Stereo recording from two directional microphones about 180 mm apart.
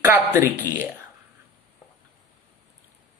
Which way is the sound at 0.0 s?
15° right (ahead or behind).